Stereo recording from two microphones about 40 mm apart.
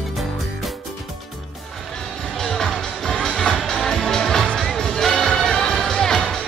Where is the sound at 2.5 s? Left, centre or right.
Centre.